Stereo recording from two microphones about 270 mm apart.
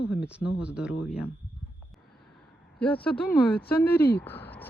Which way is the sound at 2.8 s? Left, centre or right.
Centre.